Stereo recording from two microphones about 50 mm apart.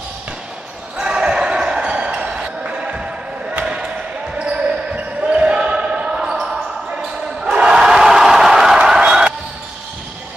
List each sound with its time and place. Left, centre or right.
0.9 s basketball bounce: centre
7.5 s crowd: centre